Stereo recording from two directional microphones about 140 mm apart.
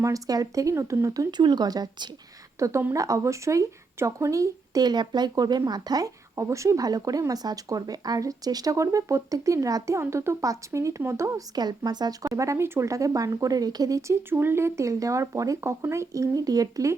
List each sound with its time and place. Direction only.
0.0 s speech: 25° right (ahead or behind)